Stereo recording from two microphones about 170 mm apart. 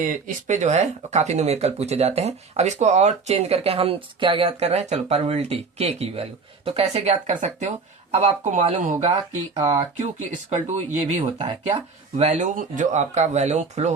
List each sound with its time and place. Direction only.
0.1 s speech: 45° right (ahead or behind)
9.6 s speech: 30° right (ahead or behind)
10.5 s speech: 40° right (ahead or behind)